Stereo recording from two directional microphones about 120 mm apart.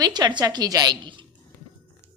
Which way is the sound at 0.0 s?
35° right (ahead or behind).